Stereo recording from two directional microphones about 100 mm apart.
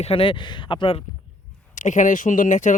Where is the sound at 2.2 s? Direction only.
90° left.